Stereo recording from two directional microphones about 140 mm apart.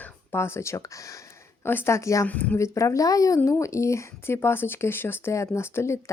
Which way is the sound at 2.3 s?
10° left (ahead or behind).